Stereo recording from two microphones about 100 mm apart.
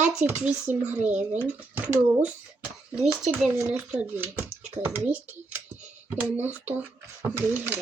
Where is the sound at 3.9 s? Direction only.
20° right (ahead or behind).